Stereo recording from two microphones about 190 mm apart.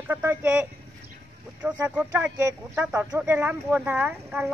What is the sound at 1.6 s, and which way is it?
Speech, 5° right (ahead or behind).